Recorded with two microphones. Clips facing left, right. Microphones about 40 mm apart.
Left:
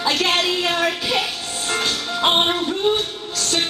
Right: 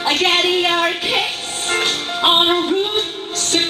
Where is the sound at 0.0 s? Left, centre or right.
Right.